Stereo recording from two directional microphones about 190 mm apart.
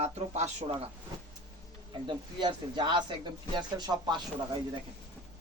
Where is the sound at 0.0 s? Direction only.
35° right (ahead or behind).